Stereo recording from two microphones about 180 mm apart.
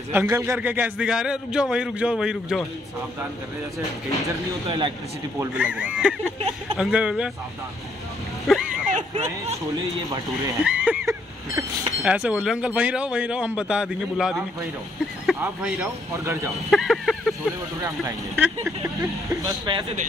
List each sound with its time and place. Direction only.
0.1 s a man's voice: 15° right (ahead or behind)
4.6 s speech: 25° right (ahead or behind)
5.4 s a man's voice: 10° right (ahead or behind)
8.5 s a sound: 5° right (ahead or behind)
8.8 s a sound: 40° right (ahead or behind)
10.6 s a sound: 5° right (ahead or behind)
12.0 s a man's voice: 5° right (ahead or behind)
15.4 s speech: 10° right (ahead or behind)
16.7 s speech: centre (ahead or behind)
17.8 s speech: 15° right (ahead or behind)